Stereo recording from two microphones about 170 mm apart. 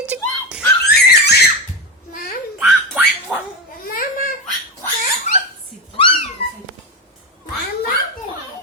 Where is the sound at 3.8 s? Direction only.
55° left (ahead or behind).